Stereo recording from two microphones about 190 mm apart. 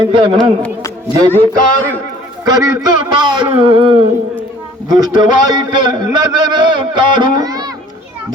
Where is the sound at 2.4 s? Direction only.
20° right (ahead or behind).